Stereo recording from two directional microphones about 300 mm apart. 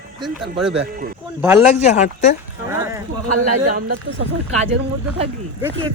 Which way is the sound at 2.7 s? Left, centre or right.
Centre.